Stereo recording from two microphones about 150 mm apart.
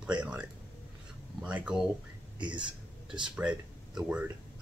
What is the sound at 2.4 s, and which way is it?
Speech, 30° right (ahead or behind).